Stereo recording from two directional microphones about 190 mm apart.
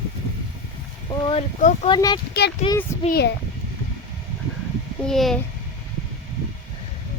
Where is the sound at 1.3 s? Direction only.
35° left (ahead or behind).